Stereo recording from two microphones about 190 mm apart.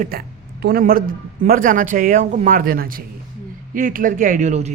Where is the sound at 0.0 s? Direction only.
55° right (ahead or behind).